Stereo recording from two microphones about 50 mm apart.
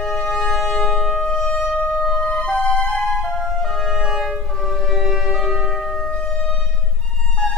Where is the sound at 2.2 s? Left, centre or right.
Left.